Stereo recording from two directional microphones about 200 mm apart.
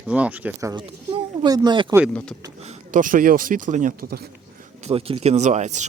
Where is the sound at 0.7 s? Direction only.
25° right (ahead or behind).